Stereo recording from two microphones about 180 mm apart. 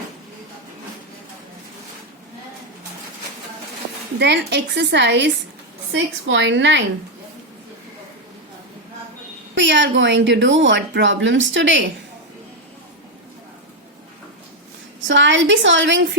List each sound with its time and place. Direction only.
4.2 s a woman's voice: 70° right (ahead or behind)
5.9 s speech: 90° right
9.6 s speech: 80° right
15.0 s speech: 90° right